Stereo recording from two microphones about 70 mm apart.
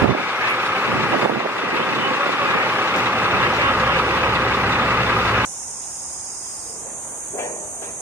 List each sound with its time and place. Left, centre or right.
0.2 s vehicle: right